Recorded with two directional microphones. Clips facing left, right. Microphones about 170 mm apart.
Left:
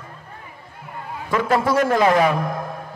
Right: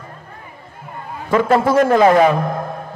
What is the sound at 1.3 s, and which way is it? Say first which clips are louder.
A man's voice: right 5 dB; 25° right (ahead or behind).